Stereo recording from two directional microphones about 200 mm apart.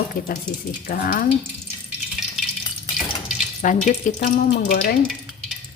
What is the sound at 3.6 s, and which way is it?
Speech, 40° left (ahead or behind).